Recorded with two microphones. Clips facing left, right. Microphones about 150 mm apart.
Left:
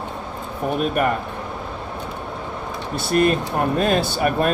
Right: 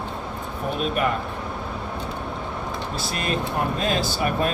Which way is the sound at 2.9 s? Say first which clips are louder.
Left 11 dB; 60° left (ahead or behind).